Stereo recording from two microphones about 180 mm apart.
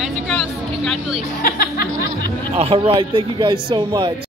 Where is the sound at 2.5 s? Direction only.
30° right (ahead or behind).